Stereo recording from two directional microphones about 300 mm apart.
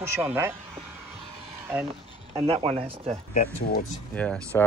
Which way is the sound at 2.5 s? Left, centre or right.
Centre.